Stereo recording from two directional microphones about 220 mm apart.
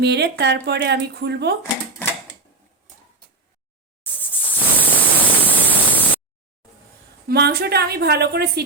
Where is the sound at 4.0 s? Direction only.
10° left (ahead or behind).